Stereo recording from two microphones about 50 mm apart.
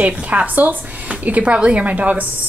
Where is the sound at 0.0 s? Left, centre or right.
Right.